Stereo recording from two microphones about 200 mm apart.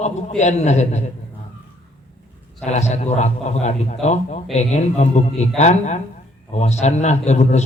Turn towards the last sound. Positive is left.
turn(degrees=35)  # may be behind; listen again after turning